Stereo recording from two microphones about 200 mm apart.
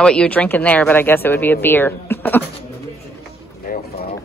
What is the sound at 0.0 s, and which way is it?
Speech, 5° left (ahead or behind).